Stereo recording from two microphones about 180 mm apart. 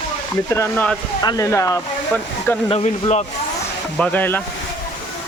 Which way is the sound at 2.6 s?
35° left (ahead or behind).